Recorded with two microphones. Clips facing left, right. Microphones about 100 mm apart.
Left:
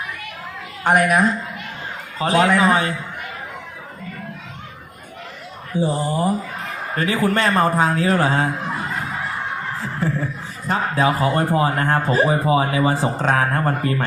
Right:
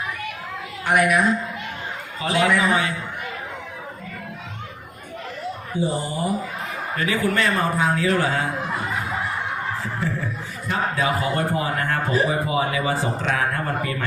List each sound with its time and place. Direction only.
0.9 s a man's voice: 35° left (ahead or behind)
5.8 s a man's voice: 35° left (ahead or behind)
9.8 s a sound: 30° left (ahead or behind)
10.7 s a man's voice: 35° left (ahead or behind)